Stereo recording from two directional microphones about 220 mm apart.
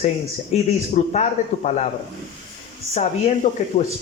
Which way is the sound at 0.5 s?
30° left (ahead or behind).